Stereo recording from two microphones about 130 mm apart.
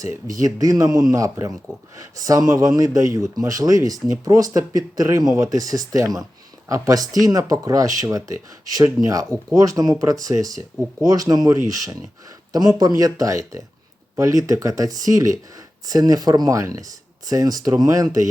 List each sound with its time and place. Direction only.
0.0 s speech: 25° right (ahead or behind)